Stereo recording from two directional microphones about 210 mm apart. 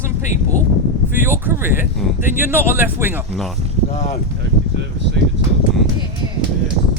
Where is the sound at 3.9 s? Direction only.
30° left (ahead or behind).